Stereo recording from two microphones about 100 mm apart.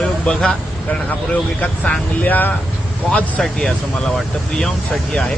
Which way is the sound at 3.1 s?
5° left (ahead or behind).